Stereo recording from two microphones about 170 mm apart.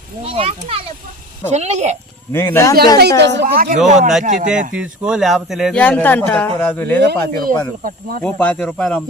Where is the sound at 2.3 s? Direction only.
15° left (ahead or behind).